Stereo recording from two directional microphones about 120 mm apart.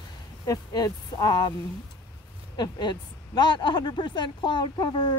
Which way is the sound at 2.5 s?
35° left (ahead or behind).